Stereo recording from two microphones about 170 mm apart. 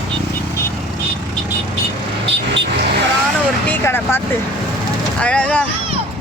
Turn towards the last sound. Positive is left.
turn(degrees=5)  # may be behind; listen again after turning